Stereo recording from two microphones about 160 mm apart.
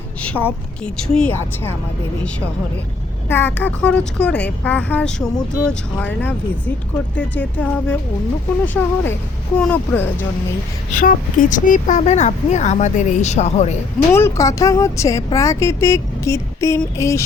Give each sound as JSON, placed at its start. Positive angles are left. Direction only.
{"t": 0.2, "sound": "speech", "side_deg": 10}
{"t": 3.2, "sound": "speech", "side_deg": 15}
{"t": 10.9, "sound": "speech", "side_deg": 55}
{"t": 14.1, "sound": "speech", "side_deg": 15}